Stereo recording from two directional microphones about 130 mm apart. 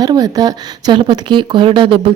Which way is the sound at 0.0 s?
30° right (ahead or behind).